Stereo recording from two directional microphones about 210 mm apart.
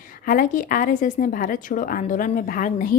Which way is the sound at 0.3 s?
40° left (ahead or behind).